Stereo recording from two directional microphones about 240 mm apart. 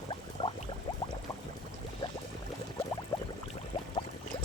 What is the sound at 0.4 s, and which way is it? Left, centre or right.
Boiling, centre.